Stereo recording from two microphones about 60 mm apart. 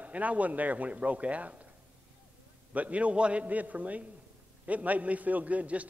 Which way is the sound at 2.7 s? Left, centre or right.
Right.